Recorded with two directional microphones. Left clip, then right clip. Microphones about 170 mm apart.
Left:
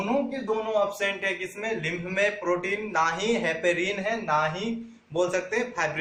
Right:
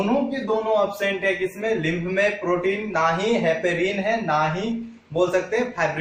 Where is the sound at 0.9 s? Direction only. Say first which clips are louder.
Right 5 dB; 40° left (ahead or behind).